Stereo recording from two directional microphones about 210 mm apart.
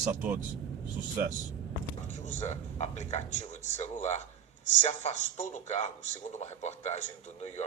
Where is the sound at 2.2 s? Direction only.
30° left (ahead or behind).